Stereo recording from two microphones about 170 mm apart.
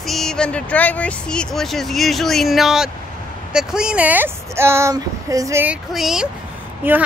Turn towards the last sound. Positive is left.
turn(degrees=-10)  # may be behind; listen again after turning